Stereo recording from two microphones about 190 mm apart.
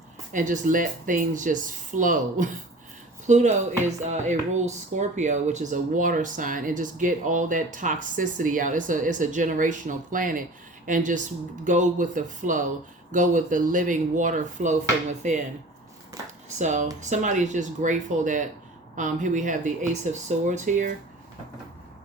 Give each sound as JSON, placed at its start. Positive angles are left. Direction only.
{"t": 0.3, "sound": "speech", "side_deg": -40}
{"t": 16.6, "sound": "speech", "side_deg": -40}